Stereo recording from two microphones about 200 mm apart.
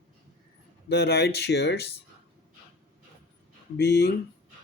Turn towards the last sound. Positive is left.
turn(degrees=55)  # may be behind; listen again after turning